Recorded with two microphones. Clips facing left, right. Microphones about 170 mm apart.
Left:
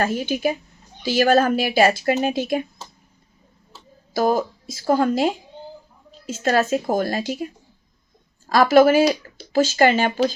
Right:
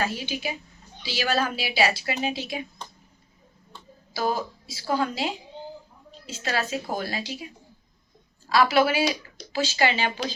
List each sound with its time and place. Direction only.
0.0 s a woman's voice: 50° left (ahead or behind)
4.1 s a woman's voice: 50° left (ahead or behind)